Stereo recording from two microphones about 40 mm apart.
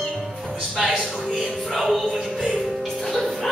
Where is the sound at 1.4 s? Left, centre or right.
Centre.